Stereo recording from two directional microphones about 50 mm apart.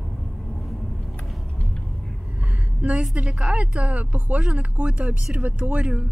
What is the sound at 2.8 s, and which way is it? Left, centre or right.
A woman's voice, right.